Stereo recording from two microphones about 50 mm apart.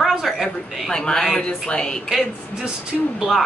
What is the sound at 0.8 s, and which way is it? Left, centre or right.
A man's voice, centre.